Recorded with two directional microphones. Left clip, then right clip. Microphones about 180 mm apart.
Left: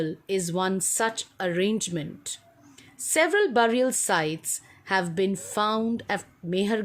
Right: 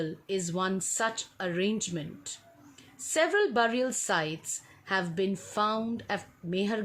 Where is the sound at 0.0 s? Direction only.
40° left (ahead or behind).